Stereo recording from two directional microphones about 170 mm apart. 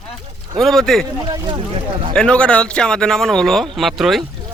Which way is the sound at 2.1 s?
5° left (ahead or behind).